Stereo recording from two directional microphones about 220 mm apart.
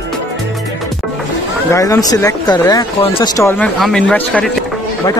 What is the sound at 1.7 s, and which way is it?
Speech, 15° left (ahead or behind).